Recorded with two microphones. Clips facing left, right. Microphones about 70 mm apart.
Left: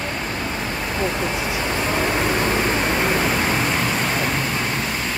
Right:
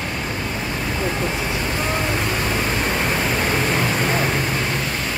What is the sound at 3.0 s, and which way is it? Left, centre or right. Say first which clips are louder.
Pink noise: left 1 dB; centre.